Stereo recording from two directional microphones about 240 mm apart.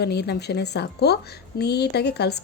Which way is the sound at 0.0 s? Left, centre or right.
Left.